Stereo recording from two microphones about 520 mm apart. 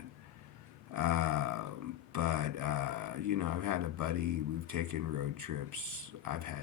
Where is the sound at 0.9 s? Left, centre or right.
Right.